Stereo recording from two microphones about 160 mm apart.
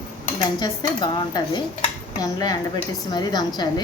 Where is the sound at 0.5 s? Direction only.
25° left (ahead or behind).